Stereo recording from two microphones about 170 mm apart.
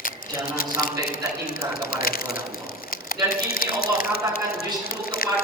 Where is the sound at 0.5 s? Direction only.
60° left (ahead or behind).